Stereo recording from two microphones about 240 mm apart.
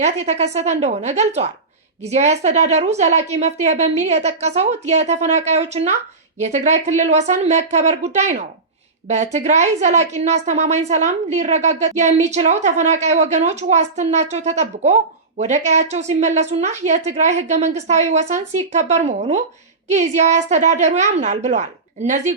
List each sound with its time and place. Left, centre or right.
0.0 s a woman's voice: right